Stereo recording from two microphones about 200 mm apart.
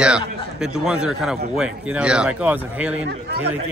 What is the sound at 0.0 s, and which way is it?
A man's voice, 5° right (ahead or behind).